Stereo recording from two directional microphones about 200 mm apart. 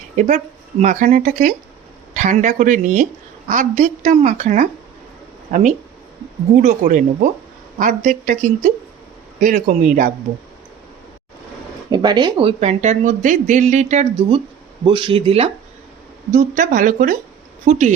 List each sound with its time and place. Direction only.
0.2 s speech: 35° right (ahead or behind)
11.9 s speech: 20° right (ahead or behind)
16.3 s speech: 40° right (ahead or behind)